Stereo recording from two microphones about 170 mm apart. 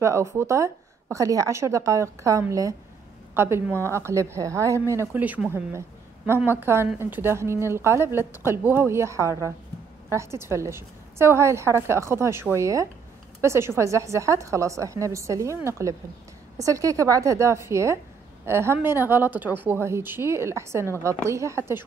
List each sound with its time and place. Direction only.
0.0 s a woman's voice: 15° right (ahead or behind)